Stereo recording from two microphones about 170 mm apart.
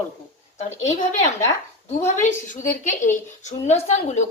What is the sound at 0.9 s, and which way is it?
A woman's voice, 40° left (ahead or behind).